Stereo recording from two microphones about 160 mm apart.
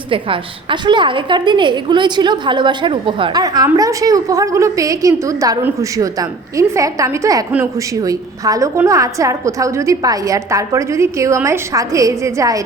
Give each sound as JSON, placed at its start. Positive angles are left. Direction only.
{"t": 0.1, "sound": "a woman's voice", "side_deg": -30}